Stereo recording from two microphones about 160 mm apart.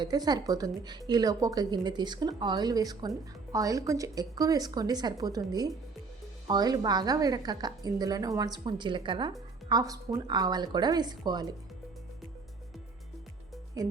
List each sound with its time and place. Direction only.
0.0 s speech: 25° right (ahead or behind)